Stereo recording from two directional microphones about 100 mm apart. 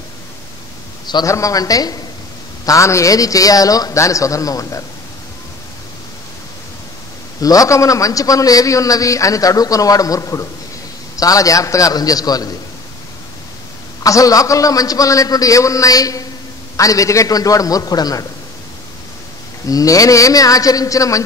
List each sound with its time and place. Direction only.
1.2 s a man's voice: 35° left (ahead or behind)
7.4 s a man's voice: 35° left (ahead or behind)
14.0 s a man's voice: 35° left (ahead or behind)
19.7 s a man's voice: 35° left (ahead or behind)